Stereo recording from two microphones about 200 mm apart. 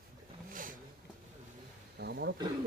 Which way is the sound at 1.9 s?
55° right (ahead or behind).